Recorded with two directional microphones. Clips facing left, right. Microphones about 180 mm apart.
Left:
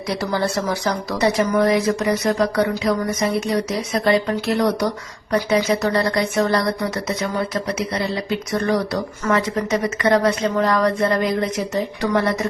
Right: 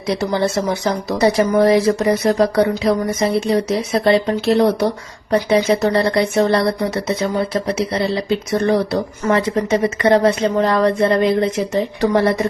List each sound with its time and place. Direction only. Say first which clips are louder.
0.1 s speech: right 4 dB; 25° right (ahead or behind)